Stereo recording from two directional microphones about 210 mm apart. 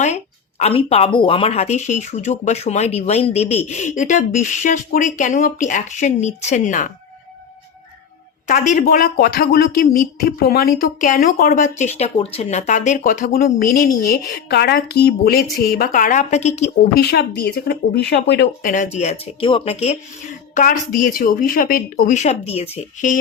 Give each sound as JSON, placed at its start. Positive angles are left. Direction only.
{"t": 0.6, "sound": "speech", "side_deg": 30}
{"t": 8.4, "sound": "speech", "side_deg": 35}
{"t": 16.9, "sound": "speech", "side_deg": 50}
{"t": 18.7, "sound": "speech", "side_deg": 35}